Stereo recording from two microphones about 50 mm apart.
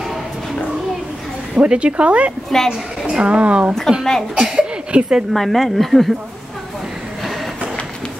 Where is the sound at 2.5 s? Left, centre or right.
Centre.